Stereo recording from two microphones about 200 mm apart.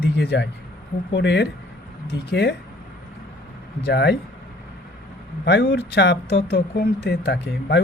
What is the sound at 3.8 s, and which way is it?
Speech, 55° left (ahead or behind).